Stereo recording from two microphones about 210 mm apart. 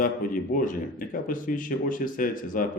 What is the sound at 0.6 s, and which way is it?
Speech, 40° left (ahead or behind).